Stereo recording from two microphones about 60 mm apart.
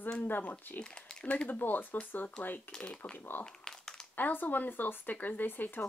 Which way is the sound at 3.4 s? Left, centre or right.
Centre.